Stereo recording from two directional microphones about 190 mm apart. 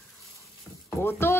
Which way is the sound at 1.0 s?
15° left (ahead or behind).